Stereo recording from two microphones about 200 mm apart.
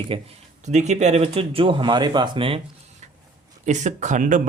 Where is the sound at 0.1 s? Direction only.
25° right (ahead or behind).